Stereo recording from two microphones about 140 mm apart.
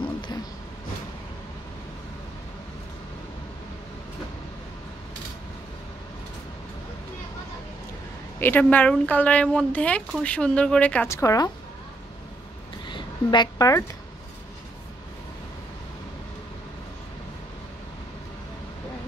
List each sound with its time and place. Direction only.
8.4 s speech: 15° left (ahead or behind)
11.1 s a woman's voice: 20° left (ahead or behind)
12.8 s a sound: 35° left (ahead or behind)